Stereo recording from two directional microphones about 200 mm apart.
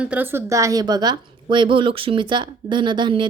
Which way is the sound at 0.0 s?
10° right (ahead or behind).